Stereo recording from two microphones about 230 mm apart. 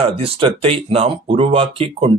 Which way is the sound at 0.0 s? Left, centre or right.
Right.